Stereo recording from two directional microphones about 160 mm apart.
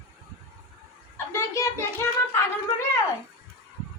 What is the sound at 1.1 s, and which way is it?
Speech, 15° left (ahead or behind).